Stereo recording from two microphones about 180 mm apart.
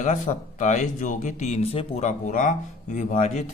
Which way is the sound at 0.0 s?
40° left (ahead or behind).